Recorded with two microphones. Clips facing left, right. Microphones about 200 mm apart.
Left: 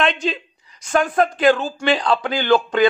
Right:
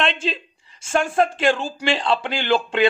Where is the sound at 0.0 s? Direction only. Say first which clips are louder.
Left 3 dB; 30° right (ahead or behind).